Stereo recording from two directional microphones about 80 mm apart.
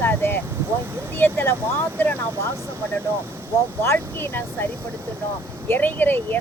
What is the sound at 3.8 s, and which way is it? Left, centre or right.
Speech, left.